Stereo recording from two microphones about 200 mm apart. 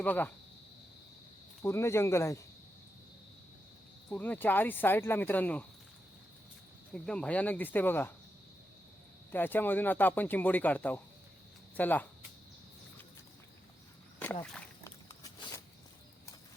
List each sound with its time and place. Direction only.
0.0 s speech: 10° left (ahead or behind)
1.6 s speech: 15° left (ahead or behind)
4.1 s speech: 10° left (ahead or behind)
6.9 s speech: 5° left (ahead or behind)
9.3 s speech: 10° left (ahead or behind)
14.8 s a sound: 15° left (ahead or behind)